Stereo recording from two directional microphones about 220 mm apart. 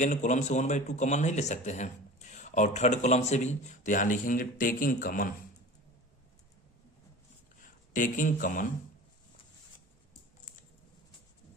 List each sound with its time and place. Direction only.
0.0 s a man's voice: 35° left (ahead or behind)
7.6 s speech: 35° left (ahead or behind)